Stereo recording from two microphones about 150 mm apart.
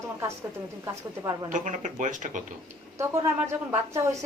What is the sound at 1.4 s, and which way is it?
Speech, 55° right (ahead or behind).